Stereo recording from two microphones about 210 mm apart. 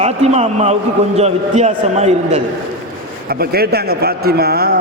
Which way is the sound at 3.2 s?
45° right (ahead or behind).